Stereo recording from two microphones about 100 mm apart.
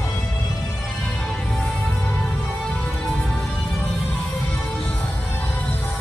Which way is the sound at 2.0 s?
15° left (ahead or behind).